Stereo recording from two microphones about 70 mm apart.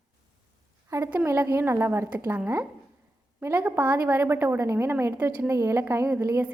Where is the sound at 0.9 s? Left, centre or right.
Right.